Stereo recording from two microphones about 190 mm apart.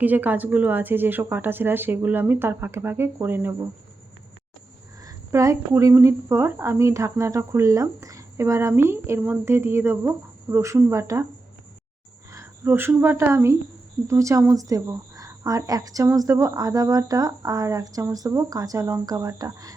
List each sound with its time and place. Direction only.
0.0 s a woman's voice: 10° right (ahead or behind)
5.0 s a woman's voice: 15° right (ahead or behind)
12.3 s speech: 15° right (ahead or behind)